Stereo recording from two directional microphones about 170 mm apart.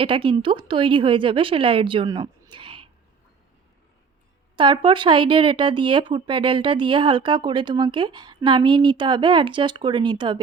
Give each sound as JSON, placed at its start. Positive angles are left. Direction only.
{"t": 0.0, "sound": "a woman's voice", "side_deg": -30}
{"t": 4.5, "sound": "speech", "side_deg": -30}